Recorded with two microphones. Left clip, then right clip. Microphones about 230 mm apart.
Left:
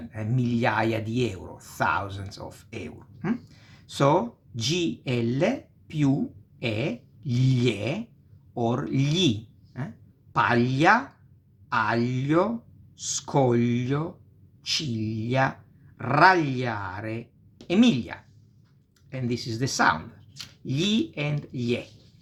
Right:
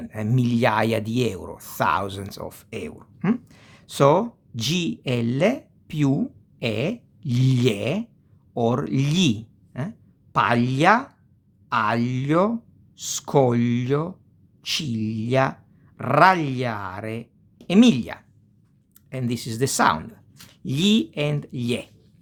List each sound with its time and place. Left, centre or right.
0.1 s speech: right